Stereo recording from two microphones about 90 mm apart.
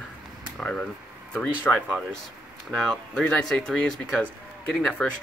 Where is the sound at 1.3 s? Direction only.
15° left (ahead or behind).